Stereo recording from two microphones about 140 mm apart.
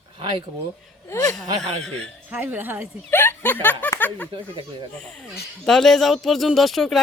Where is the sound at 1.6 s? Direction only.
55° right (ahead or behind).